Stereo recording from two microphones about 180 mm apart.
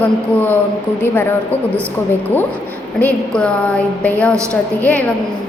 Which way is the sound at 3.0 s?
5° left (ahead or behind).